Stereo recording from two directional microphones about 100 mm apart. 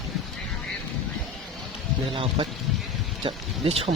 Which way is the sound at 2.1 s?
65° right (ahead or behind).